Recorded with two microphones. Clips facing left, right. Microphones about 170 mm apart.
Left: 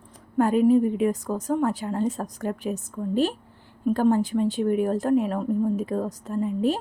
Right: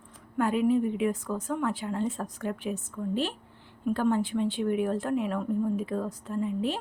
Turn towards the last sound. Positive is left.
turn(degrees=40)  # may be behind; listen again after turning